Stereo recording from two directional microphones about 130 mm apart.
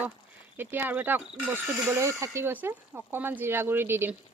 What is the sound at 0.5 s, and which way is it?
Speech, 15° right (ahead or behind).